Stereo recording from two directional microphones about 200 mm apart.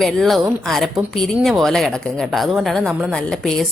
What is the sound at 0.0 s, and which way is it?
A woman's voice, centre (ahead or behind).